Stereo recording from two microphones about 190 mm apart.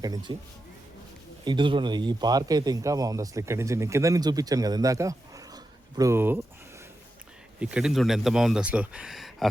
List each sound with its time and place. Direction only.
0.0 s speech: 20° right (ahead or behind)
1.5 s a man's voice: 25° right (ahead or behind)
7.6 s speech: 5° right (ahead or behind)